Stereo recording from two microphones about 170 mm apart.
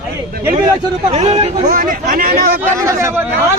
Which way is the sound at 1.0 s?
40° right (ahead or behind).